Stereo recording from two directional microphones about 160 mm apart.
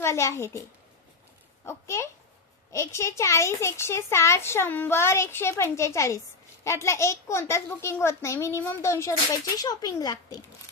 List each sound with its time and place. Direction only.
0.0 s a child's voice: 20° left (ahead or behind)
1.7 s a child's voice: 15° left (ahead or behind)